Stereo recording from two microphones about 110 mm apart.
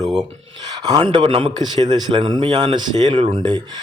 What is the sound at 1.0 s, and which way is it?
A man's voice, 50° right (ahead or behind).